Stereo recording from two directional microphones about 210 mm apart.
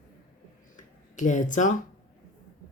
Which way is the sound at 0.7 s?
35° left (ahead or behind).